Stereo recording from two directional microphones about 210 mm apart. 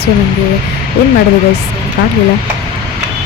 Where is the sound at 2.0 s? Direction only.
45° left (ahead or behind).